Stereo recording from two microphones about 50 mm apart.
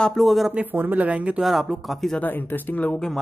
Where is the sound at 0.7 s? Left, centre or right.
Right.